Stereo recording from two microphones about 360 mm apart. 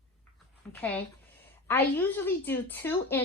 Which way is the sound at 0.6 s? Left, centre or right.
Centre.